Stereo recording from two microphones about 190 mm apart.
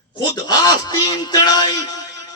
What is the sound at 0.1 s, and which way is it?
Speech, 20° left (ahead or behind).